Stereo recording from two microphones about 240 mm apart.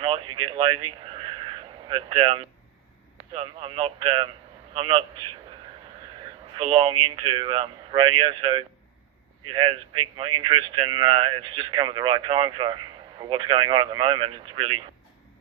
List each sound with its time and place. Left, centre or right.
0.3 s speech: right
1.0 s a sound: right
3.3 s speech: right
6.6 s speech: right